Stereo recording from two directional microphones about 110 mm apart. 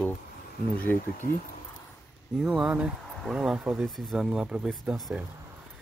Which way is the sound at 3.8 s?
Centre (ahead or behind).